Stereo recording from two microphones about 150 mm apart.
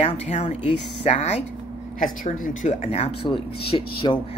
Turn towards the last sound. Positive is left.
turn(degrees=35)  # may be behind; listen again after turning